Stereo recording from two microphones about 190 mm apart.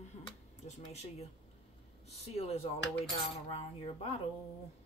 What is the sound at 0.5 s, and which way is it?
A woman's voice, 35° left (ahead or behind).